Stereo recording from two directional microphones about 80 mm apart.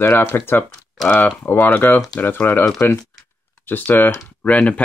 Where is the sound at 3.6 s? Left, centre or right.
Left.